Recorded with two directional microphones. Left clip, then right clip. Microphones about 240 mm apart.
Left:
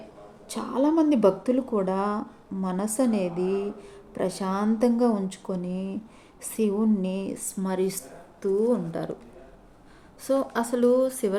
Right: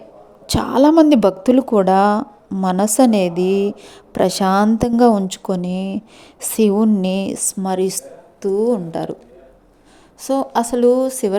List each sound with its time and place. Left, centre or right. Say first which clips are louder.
0.4 s a woman's voice: right 12 dB; right
10.2 s a woman's voice: right 7 dB; right